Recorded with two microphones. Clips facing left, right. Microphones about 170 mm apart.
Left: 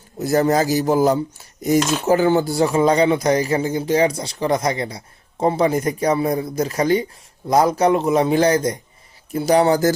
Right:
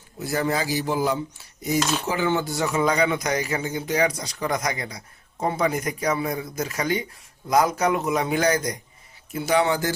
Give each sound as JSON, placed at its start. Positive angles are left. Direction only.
{"t": 0.2, "sound": "speech", "side_deg": 40}
{"t": 1.6, "sound": "cutlery", "side_deg": 45}